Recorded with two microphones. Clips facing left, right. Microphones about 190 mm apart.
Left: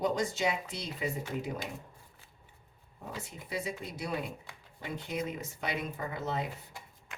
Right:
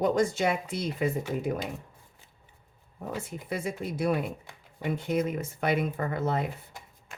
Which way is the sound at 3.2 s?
50° right (ahead or behind).